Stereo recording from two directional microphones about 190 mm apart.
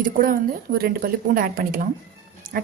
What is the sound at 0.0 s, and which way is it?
A woman's voice, 50° right (ahead or behind).